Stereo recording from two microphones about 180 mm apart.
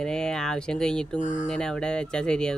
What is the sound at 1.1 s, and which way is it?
Speech, 45° left (ahead or behind).